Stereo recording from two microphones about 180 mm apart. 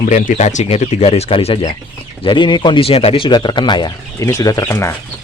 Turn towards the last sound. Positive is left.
turn(degrees=15)  # may be behind; listen again after turning